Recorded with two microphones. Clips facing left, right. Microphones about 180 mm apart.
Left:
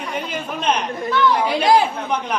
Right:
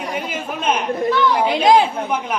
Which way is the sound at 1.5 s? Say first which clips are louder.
Right 4 dB; 20° right (ahead or behind).